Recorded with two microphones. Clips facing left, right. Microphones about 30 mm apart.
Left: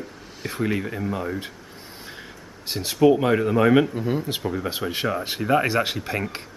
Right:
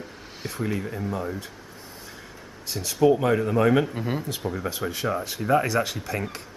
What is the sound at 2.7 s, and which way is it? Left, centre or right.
Speech, left.